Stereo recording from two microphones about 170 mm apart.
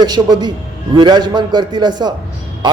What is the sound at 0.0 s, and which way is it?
A man's voice, 25° right (ahead or behind).